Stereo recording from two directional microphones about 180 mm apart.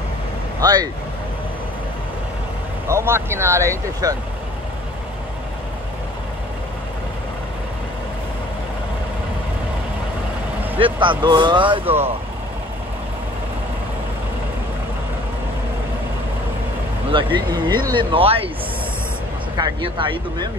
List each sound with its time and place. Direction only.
0.6 s speech: 20° right (ahead or behind)
2.9 s speech: 15° right (ahead or behind)
10.8 s speech: 25° right (ahead or behind)
11.8 s speech: 10° right (ahead or behind)
17.1 s speech: 25° right (ahead or behind)
19.5 s speech: 25° right (ahead or behind)